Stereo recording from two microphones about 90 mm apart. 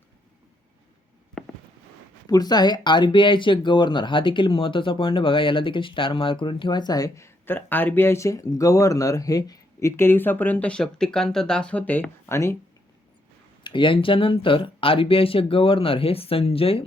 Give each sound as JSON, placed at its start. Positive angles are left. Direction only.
{"t": 1.4, "sound": "fireworks", "side_deg": 5}
{"t": 2.2, "sound": "speech", "side_deg": 45}
{"t": 7.3, "sound": "speech", "side_deg": 25}
{"t": 10.0, "sound": "speech", "side_deg": 25}
{"t": 13.7, "sound": "speech", "side_deg": 65}